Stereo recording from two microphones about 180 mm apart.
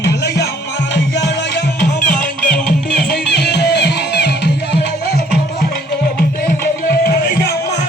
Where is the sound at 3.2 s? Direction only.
70° left (ahead or behind).